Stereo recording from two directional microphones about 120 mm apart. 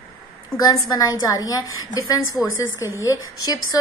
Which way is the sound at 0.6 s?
30° left (ahead or behind).